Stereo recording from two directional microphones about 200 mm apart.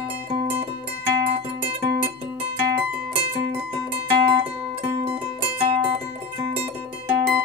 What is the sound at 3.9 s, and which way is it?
Music, 20° right (ahead or behind).